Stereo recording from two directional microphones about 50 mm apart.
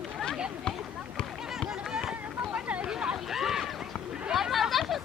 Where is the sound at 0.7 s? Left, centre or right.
Centre.